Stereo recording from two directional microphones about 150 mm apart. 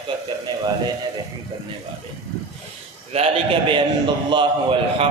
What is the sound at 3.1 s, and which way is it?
Speech, 40° right (ahead or behind).